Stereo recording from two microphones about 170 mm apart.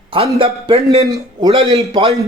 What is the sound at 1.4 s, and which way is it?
Speech, 35° right (ahead or behind).